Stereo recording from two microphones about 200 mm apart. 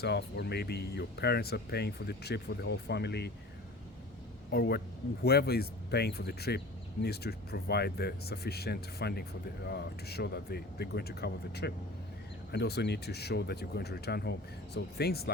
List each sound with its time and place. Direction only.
0.0 s speech: 55° left (ahead or behind)
4.5 s speech: 50° left (ahead or behind)